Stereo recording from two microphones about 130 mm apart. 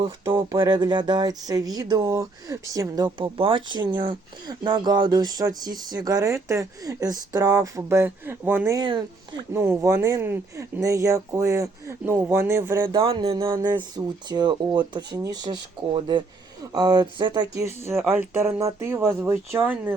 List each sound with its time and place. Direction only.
0.3 s speech: 20° right (ahead or behind)
0.6 s speech: 35° right (ahead or behind)
3.3 s speech: 45° right (ahead or behind); by 8.7 s 15° right (ahead or behind)
8.7 s speech: 35° right (ahead or behind)
9.5 s speech: 15° right (ahead or behind)
13.0 s speech: 45° right (ahead or behind); by 19.9 s 15° right (ahead or behind)